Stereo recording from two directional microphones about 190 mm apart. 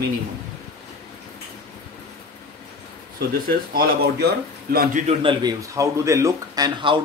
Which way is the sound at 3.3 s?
55° right (ahead or behind).